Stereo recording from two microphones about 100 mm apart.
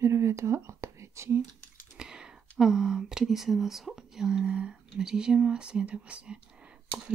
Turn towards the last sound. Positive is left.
turn(degrees=-10)  # may be behind; listen again after turning